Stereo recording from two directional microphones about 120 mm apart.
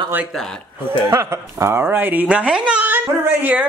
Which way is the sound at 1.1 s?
25° right (ahead or behind).